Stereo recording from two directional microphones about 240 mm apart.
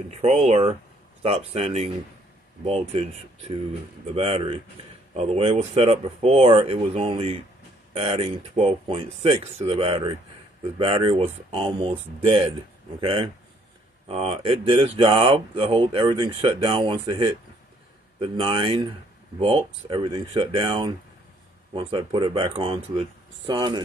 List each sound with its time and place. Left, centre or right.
0.1 s speech: right